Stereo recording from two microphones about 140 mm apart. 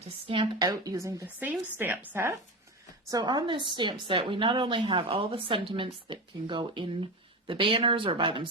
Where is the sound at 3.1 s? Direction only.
30° right (ahead or behind).